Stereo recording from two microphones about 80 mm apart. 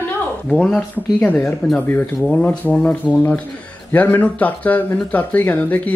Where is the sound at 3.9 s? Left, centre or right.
Centre.